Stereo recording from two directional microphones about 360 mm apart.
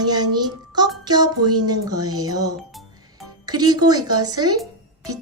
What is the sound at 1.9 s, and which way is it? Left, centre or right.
Speech, right.